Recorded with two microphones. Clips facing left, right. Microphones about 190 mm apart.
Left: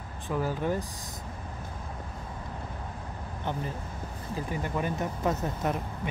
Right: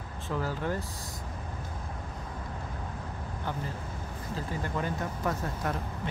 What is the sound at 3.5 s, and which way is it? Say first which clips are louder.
Speech: left 3 dB; 20° left (ahead or behind).